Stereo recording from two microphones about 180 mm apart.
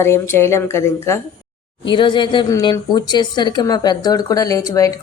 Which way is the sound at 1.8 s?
25° left (ahead or behind).